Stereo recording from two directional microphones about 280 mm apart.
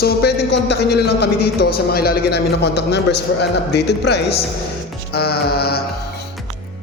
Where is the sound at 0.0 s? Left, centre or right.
Left.